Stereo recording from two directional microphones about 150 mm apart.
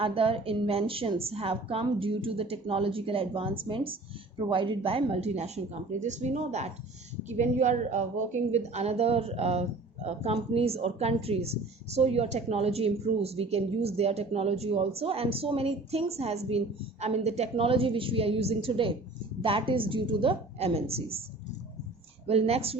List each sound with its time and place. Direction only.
0.0 s a woman's voice: 40° right (ahead or behind)
22.3 s a woman's voice: 45° right (ahead or behind)